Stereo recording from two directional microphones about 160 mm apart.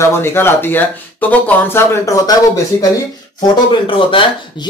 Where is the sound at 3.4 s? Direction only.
30° left (ahead or behind).